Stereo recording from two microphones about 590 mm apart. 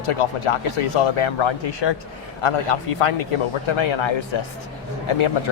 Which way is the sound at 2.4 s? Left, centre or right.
Left.